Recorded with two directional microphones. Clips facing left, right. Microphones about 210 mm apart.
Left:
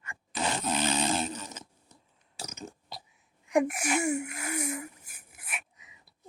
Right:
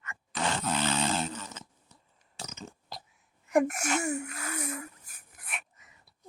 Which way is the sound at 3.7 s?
10° left (ahead or behind).